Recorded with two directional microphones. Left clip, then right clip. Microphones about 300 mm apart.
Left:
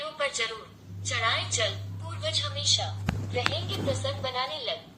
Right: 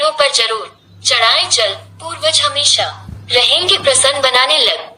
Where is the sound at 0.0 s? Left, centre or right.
Right.